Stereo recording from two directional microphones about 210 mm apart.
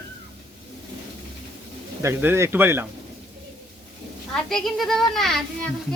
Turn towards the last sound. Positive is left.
turn(degrees=0)  # may be behind; listen again after turning